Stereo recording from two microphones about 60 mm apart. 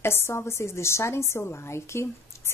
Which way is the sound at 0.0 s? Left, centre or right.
Left.